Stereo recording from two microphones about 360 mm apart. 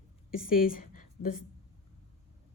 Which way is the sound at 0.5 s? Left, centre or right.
Left.